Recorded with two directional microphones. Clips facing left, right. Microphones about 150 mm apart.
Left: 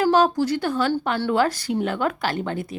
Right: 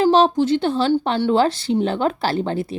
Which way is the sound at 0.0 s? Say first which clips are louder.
Right 3 dB; 25° right (ahead or behind).